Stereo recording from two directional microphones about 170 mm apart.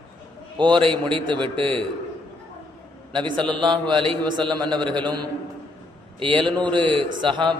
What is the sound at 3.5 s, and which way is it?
A man's voice, 25° right (ahead or behind).